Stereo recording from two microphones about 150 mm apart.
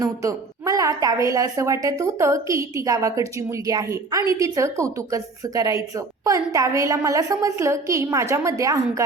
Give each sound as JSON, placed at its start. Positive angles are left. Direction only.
{"t": 0.0, "sound": "a woman's voice", "side_deg": -20}